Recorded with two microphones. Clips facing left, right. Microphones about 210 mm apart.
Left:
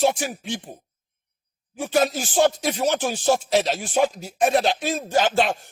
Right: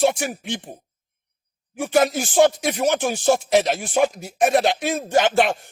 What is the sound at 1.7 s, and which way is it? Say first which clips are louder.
A man's voice: right 3 dB; 50° right (ahead or behind).